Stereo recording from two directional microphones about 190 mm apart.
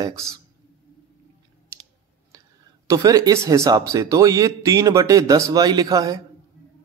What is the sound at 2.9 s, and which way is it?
Speech, 20° right (ahead or behind).